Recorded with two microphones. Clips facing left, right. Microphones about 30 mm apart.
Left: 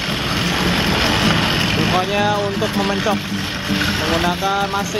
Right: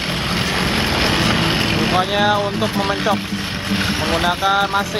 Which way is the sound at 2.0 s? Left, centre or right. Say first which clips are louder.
Right 1 dB; right.